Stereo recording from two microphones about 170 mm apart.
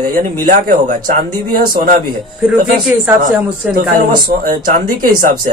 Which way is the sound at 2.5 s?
5° right (ahead or behind).